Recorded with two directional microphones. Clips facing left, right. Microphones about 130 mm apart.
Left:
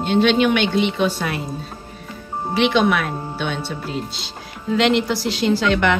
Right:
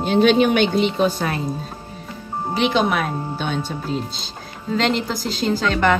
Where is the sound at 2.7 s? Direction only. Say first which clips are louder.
Left 1 dB; 40° right (ahead or behind).